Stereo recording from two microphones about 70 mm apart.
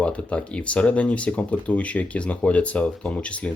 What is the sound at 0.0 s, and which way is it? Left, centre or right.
Speech, centre.